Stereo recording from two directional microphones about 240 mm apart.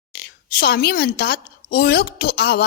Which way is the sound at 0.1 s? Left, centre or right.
Left.